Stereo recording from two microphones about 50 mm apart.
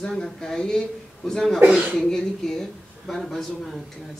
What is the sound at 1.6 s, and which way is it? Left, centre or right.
Speech, right.